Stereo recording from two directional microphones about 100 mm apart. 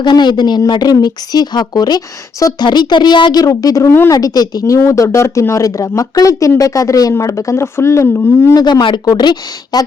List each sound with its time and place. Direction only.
0.0 s speech: 50° left (ahead or behind)
3.4 s speech: 35° left (ahead or behind)
8.5 s speech: 45° left (ahead or behind)